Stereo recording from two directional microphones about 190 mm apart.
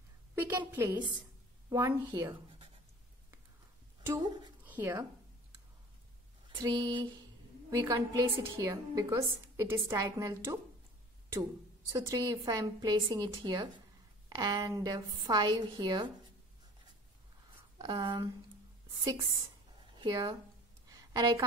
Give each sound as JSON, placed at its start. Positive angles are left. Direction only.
{"t": 0.4, "sound": "a woman's voice", "side_deg": -15}
{"t": 4.0, "sound": "a woman's voice", "side_deg": -20}
{"t": 6.6, "sound": "a woman's voice", "side_deg": -25}
{"t": 11.9, "sound": "a woman's voice", "side_deg": -15}
{"t": 17.7, "sound": "a woman's voice", "side_deg": -20}
{"t": 19.9, "sound": "speech", "side_deg": -20}
{"t": 20.9, "sound": "a sound", "side_deg": -20}